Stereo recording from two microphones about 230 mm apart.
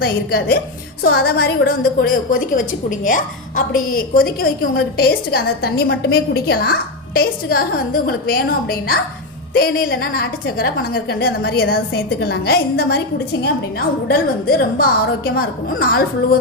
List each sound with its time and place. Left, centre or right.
0.0 s a woman's voice: left